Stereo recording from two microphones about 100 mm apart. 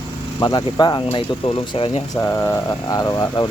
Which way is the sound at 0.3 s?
45° left (ahead or behind).